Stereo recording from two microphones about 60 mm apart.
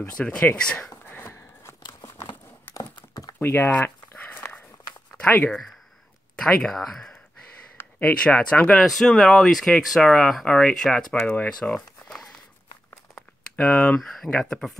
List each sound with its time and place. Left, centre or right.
0.2 s speech: centre
1.2 s a sound: left
3.4 s speech: left
3.8 s a sound: left
5.1 s speech: left
6.6 s speech: centre
7.8 s a sound: left
8.2 s speech: centre
8.7 s speech: centre
13.6 s speech: left
13.9 s speech: centre